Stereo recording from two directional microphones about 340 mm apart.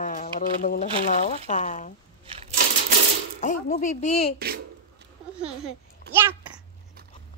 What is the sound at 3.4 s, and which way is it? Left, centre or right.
Speech, left.